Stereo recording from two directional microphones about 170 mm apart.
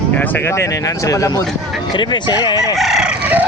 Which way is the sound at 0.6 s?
20° left (ahead or behind).